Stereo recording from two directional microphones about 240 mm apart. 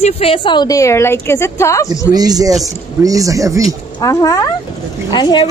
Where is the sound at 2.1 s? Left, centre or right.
Centre.